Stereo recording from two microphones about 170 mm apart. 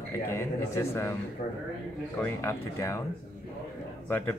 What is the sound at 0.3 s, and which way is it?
Speech, 15° left (ahead or behind).